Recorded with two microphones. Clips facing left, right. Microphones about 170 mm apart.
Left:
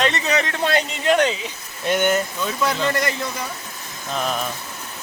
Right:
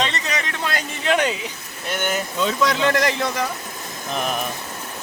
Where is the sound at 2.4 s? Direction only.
90° right.